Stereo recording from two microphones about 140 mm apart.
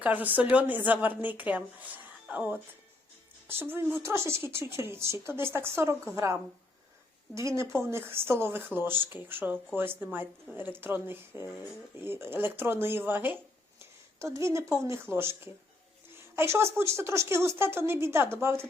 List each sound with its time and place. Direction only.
0.0 s a woman's voice: 10° right (ahead or behind)